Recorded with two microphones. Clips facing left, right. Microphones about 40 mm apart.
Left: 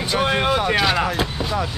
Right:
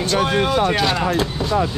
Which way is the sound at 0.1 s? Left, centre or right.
Centre.